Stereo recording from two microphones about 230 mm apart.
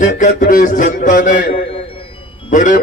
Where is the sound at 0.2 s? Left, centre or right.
Left.